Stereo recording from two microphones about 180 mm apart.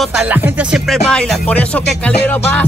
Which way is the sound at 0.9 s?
5° left (ahead or behind).